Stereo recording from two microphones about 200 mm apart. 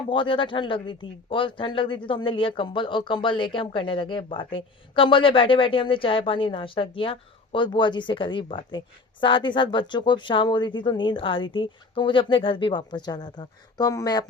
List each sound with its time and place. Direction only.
0.1 s speech: 25° left (ahead or behind)